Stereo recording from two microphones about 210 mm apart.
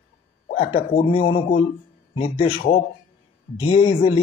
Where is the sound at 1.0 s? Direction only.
25° left (ahead or behind).